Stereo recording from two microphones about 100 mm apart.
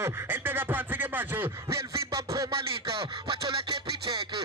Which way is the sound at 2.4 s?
60° right (ahead or behind).